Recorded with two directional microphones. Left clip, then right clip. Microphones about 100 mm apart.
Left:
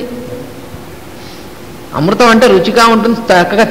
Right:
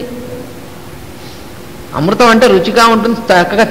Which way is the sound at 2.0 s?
30° right (ahead or behind).